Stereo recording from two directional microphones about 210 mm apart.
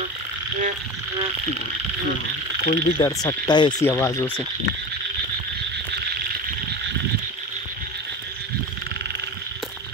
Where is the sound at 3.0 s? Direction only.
15° left (ahead or behind).